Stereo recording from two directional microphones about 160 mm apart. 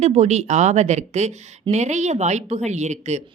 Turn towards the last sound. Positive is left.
turn(degrees=-45)  # may be behind; listen again after turning